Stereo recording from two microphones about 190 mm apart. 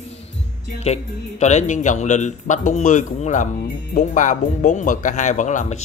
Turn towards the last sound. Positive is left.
turn(degrees=40)  # may be behind; listen again after turning